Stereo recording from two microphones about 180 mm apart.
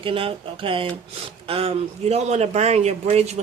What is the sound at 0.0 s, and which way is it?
A man's voice, 30° right (ahead or behind).